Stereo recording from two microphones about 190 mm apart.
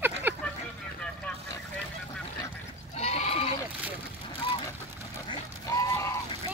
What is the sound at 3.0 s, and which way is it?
Goat, 35° left (ahead or behind).